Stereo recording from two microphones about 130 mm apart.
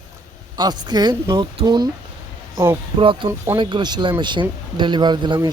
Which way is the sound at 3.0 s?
40° right (ahead or behind).